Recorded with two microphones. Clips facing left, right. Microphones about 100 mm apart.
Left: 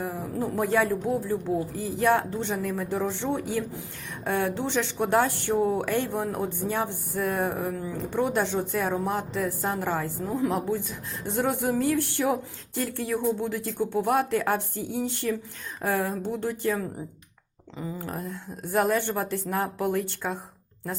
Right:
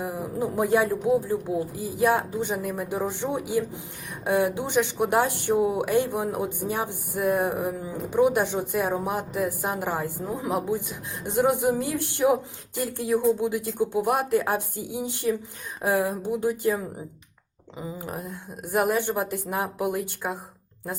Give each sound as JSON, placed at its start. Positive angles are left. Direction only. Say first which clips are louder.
{"t": 0.0, "sound": "speech", "louder": "right 1 dB", "side_deg": -15}